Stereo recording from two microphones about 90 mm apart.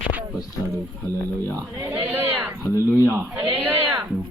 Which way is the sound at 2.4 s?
30° right (ahead or behind).